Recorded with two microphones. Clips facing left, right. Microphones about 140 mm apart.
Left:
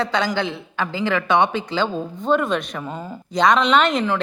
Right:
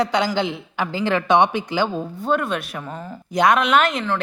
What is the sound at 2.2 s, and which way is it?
A man's voice, centre (ahead or behind).